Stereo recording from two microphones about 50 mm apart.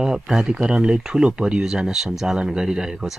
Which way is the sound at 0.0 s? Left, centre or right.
Centre.